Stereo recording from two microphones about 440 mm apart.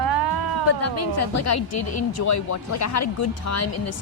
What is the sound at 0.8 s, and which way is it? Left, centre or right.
Speech, left.